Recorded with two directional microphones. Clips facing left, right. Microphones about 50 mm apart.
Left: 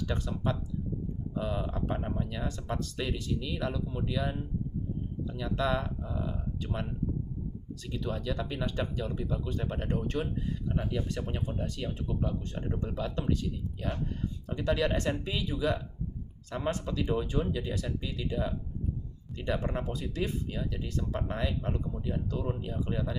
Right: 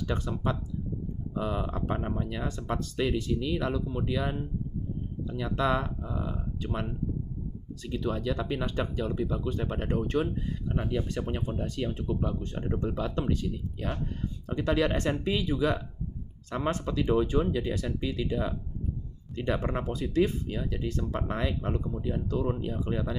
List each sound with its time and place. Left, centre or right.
0.0 s speech: right
7.9 s speech: right
19.5 s speech: right